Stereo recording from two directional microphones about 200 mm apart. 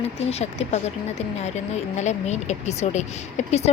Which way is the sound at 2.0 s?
35° left (ahead or behind).